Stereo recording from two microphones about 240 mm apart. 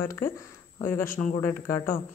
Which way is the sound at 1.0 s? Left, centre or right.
Left.